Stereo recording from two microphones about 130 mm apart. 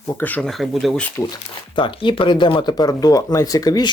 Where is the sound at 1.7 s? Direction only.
40° left (ahead or behind).